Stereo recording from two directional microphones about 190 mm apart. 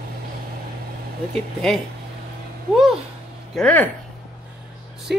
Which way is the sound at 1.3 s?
Centre (ahead or behind).